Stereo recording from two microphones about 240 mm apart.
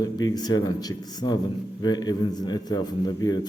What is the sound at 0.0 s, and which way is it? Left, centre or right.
A man's voice, centre.